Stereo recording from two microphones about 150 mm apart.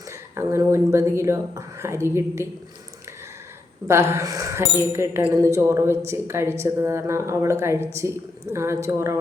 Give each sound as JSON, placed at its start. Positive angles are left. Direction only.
{"t": 0.1, "sound": "speech", "side_deg": -20}
{"t": 3.8, "sound": "speech", "side_deg": -20}